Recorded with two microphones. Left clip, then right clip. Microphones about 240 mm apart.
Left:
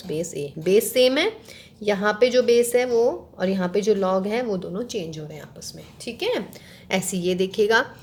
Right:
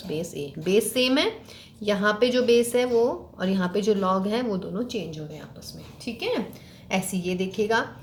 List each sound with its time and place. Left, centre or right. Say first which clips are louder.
0.1 s a woman's voice: left 3 dB; left
5.6 s a woman's voice: left 2 dB; left